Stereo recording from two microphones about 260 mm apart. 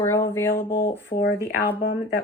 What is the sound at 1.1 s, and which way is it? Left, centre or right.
Speech, left.